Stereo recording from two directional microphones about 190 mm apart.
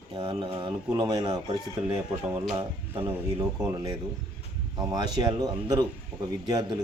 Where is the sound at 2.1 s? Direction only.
10° right (ahead or behind).